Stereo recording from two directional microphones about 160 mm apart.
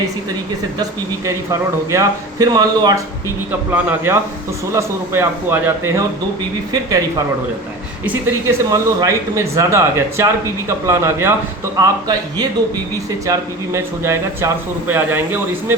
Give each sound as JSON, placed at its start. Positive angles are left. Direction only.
{"t": 0.8, "sound": "a man's voice", "side_deg": -20}
{"t": 8.0, "sound": "speech", "side_deg": -15}